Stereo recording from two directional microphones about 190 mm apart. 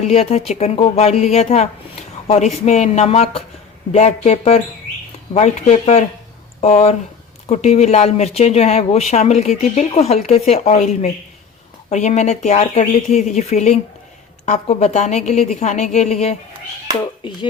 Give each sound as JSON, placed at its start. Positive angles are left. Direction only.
{"t": 0.0, "sound": "speech", "side_deg": 35}